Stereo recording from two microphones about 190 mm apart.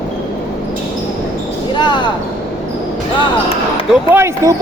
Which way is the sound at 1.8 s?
25° left (ahead or behind).